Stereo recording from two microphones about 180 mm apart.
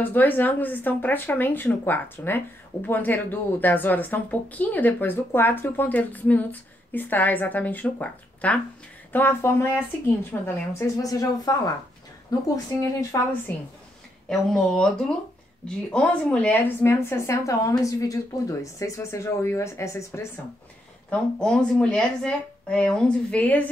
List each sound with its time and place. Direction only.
0.0 s a woman's voice: 10° left (ahead or behind)
14.3 s a woman's voice: 5° left (ahead or behind)
21.1 s speech: 5° left (ahead or behind)